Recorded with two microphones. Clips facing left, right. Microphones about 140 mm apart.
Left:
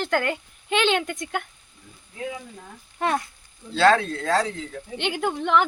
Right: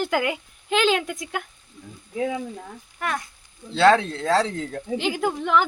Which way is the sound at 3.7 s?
25° right (ahead or behind).